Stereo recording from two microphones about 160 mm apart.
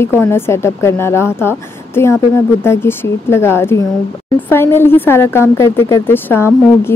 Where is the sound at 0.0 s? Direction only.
15° left (ahead or behind).